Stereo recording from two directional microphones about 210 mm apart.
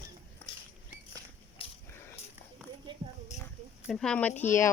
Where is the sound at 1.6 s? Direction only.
25° left (ahead or behind).